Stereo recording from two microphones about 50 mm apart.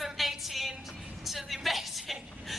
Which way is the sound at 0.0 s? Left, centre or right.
Centre.